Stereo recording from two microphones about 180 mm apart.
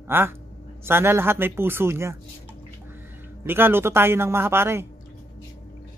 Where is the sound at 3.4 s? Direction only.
10° right (ahead or behind).